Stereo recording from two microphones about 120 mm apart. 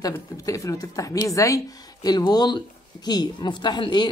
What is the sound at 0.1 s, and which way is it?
A woman's voice, 25° left (ahead or behind).